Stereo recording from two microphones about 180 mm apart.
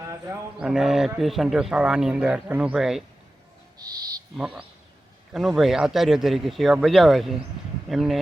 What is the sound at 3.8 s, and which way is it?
Speech, 20° right (ahead or behind).